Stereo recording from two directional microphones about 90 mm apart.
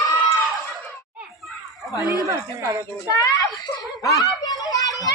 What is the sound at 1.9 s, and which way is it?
Speech, 45° left (ahead or behind).